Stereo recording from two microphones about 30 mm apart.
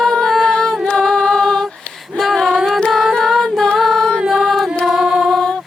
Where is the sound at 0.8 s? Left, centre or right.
Left.